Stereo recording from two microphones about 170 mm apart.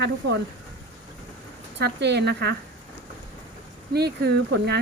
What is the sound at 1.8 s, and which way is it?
Speech, 80° right.